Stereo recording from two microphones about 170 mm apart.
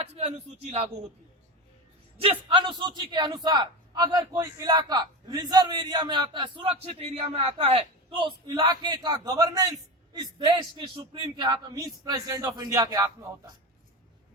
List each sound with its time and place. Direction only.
0.2 s speech: 40° right (ahead or behind)
2.2 s a man's voice: 30° right (ahead or behind)